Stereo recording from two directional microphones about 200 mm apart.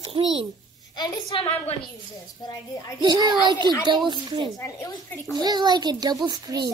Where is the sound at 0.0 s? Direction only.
25° right (ahead or behind).